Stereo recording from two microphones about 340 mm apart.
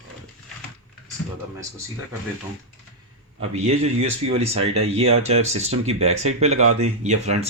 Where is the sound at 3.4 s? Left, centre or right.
Centre.